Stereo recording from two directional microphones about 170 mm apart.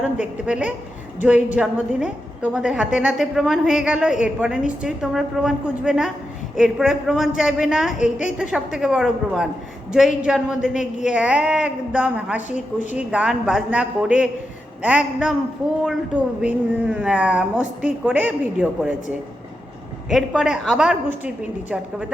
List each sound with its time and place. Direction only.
0.0 s a woman's voice: 5° right (ahead or behind)
7.9 s a woman's voice: 45° left (ahead or behind)
8.4 s a woman's voice: 5° right (ahead or behind)
20.1 s a woman's voice: 5° right (ahead or behind)